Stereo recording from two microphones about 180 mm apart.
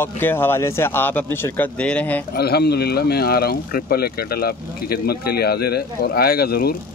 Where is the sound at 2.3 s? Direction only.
60° left (ahead or behind).